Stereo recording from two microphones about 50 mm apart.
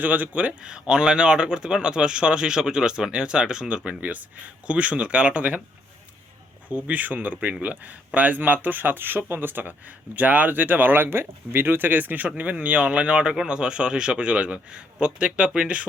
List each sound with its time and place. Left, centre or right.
0.0 s speech: right
0.7 s a man's voice: centre
6.7 s a man's voice: right